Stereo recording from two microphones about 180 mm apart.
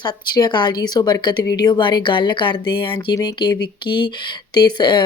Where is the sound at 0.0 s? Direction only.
25° left (ahead or behind).